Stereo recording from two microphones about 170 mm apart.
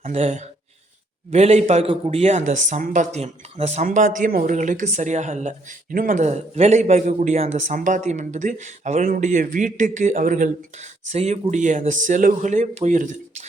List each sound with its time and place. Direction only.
0.1 s speech: 40° right (ahead or behind)
11.1 s speech: 40° right (ahead or behind)